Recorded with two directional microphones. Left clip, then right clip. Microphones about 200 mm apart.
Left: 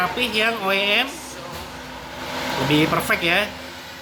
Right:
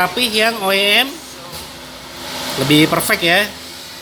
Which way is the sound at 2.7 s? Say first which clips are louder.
Right 6 dB; 45° right (ahead or behind).